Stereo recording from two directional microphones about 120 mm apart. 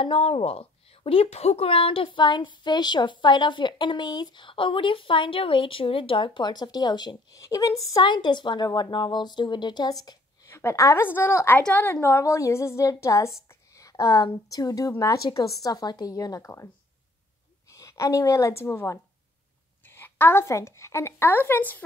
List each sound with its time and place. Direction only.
0.0 s a woman's voice: 50° left (ahead or behind); by 10.1 s 35° left (ahead or behind)
10.5 s a woman's voice: 20° left (ahead or behind)